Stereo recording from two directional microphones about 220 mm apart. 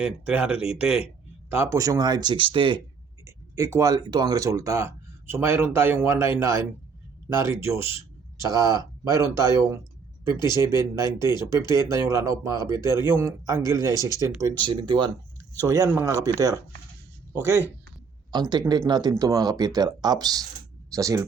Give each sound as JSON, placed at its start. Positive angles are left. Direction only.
{"t": 0.0, "sound": "speech", "side_deg": -5}
{"t": 7.3, "sound": "speech", "side_deg": -15}